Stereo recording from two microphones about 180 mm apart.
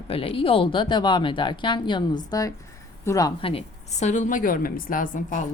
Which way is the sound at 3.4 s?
30° left (ahead or behind).